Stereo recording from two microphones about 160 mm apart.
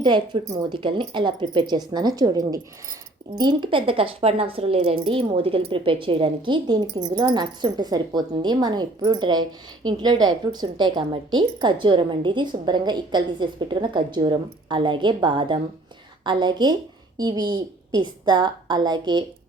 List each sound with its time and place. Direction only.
0.7 s speech: 30° right (ahead or behind)